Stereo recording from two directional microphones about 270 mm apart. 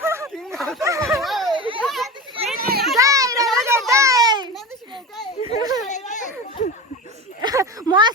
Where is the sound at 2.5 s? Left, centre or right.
Right.